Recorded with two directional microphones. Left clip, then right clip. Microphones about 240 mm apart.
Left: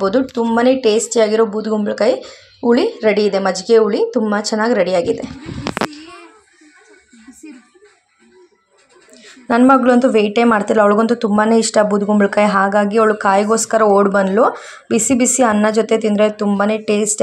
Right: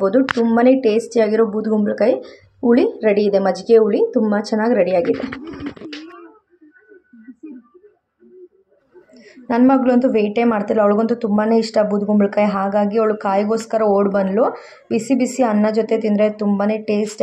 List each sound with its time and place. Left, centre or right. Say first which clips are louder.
0.0 s speech: even; centre
9.1 s a woman's voice: left 4 dB; centre